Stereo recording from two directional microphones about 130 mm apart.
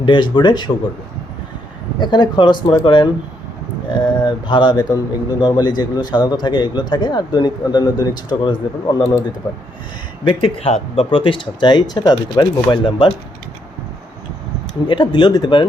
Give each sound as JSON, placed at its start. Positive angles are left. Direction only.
{"t": 0.0, "sound": "speech", "side_deg": 35}
{"t": 2.0, "sound": "speech", "side_deg": 35}
{"t": 10.2, "sound": "speech", "side_deg": 45}
{"t": 14.8, "sound": "speech", "side_deg": 40}